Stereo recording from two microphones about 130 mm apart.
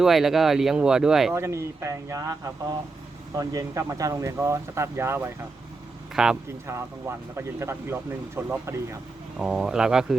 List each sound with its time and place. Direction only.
0.0 s speech: 5° right (ahead or behind)
1.3 s speech: 20° right (ahead or behind)
6.2 s speech: 5° right (ahead or behind)
6.7 s speech: 20° right (ahead or behind)
9.4 s speech: 5° right (ahead or behind)